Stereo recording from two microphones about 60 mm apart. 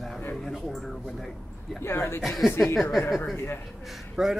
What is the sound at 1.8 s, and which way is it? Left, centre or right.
Speech, left.